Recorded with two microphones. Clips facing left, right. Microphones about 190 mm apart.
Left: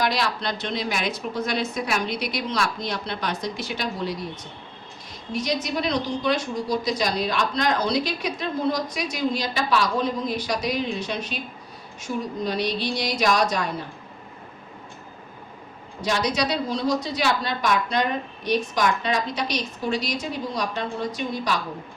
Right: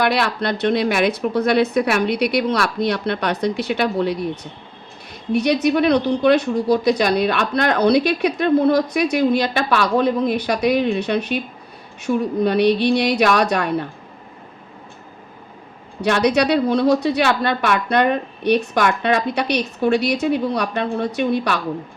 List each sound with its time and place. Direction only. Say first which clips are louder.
0.0 s speech: right 6 dB; 60° right (ahead or behind)
5.3 s speech: right 9 dB; 65° right (ahead or behind)
16.0 s speech: right 8 dB; 65° right (ahead or behind)